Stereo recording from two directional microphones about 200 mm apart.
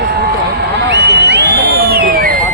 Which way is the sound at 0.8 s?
55° right (ahead or behind).